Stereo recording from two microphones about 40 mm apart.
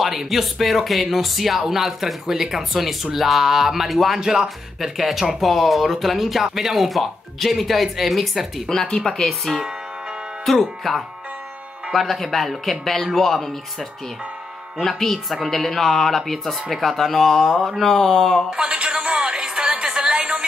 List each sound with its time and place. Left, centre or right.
0.0 s speech: centre
8.9 s speech: centre
9.2 s speech: centre
18.6 s music: right